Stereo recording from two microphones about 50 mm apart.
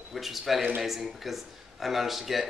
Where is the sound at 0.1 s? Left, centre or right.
Centre.